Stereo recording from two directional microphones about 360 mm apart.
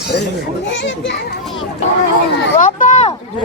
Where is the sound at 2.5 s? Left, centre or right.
Left.